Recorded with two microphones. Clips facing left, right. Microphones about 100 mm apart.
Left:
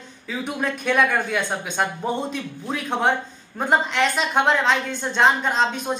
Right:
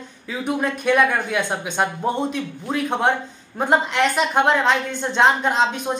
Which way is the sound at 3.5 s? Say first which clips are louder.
Right 2 dB; 10° right (ahead or behind).